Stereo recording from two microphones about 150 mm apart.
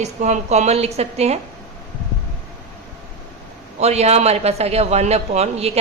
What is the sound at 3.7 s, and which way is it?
A man's voice, 45° right (ahead or behind).